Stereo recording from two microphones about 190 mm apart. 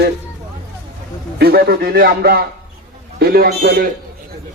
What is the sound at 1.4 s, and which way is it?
A man's voice, 55° right (ahead or behind).